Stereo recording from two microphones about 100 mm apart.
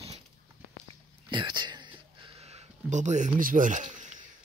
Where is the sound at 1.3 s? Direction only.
50° right (ahead or behind).